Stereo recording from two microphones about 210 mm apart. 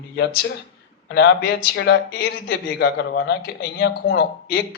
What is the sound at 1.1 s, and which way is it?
Speech, 55° left (ahead or behind).